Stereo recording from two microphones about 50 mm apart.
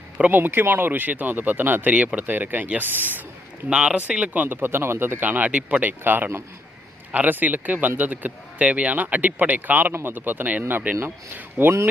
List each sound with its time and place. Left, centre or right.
0.2 s speech: right
3.7 s speech: right
4.4 s speech: right
5.2 s speech: right
5.5 s speech: right
6.0 s speech: right